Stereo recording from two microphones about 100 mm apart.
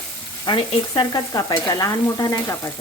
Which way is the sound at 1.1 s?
40° left (ahead or behind).